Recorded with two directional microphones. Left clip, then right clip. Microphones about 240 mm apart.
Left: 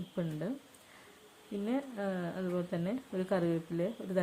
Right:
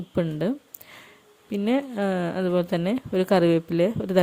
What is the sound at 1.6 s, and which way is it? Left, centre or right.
Speech, right.